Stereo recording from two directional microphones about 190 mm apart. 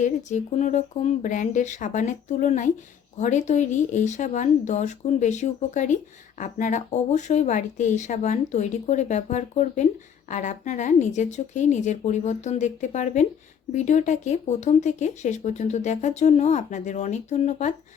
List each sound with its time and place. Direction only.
0.0 s speech: 40° left (ahead or behind)